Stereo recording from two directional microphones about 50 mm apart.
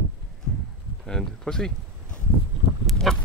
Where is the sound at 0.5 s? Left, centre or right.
Centre.